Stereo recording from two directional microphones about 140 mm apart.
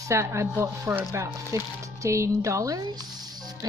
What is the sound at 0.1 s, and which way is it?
Speech, 20° right (ahead or behind).